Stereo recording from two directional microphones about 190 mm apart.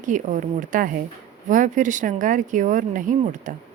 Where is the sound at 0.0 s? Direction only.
40° right (ahead or behind).